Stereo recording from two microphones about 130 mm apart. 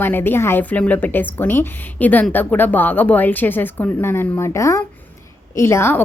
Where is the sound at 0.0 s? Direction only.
15° left (ahead or behind).